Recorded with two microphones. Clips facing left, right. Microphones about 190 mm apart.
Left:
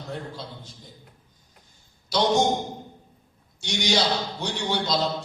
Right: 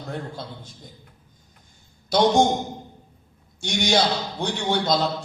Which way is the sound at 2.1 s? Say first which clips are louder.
Right 5 dB; 50° right (ahead or behind).